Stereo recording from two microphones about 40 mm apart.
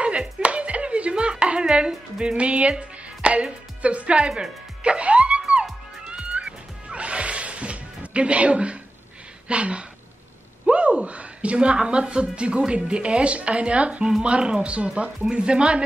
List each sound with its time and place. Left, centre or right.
0.4 s music: right
2.8 s speech: right
6.0 s music: right
9.5 s speech: right